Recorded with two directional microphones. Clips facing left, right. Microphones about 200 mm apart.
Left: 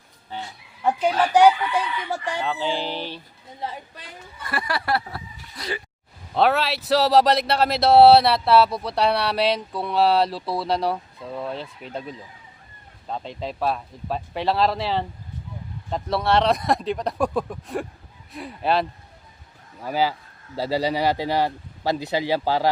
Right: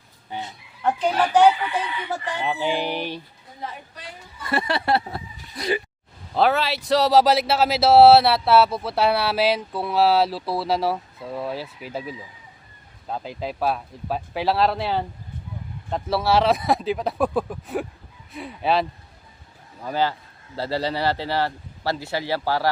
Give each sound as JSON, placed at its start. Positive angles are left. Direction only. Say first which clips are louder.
{"t": 0.3, "sound": "fowl", "louder": "right 2 dB", "side_deg": -15}
{"t": 0.8, "sound": "speech", "louder": "even", "side_deg": 10}
{"t": 2.4, "sound": "a sound", "louder": "right 4 dB", "side_deg": -15}
{"t": 4.5, "sound": "speech", "louder": "right 3 dB", "side_deg": -25}
{"t": 6.3, "sound": "speech", "louder": "even", "side_deg": 0}